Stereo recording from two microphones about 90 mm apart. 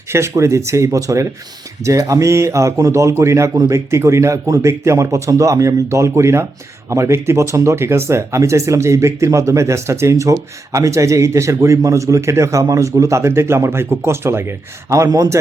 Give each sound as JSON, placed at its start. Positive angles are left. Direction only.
{"t": 0.1, "sound": "speech", "side_deg": -30}